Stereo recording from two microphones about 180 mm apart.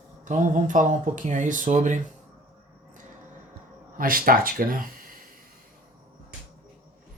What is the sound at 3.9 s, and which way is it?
Speech, 50° right (ahead or behind).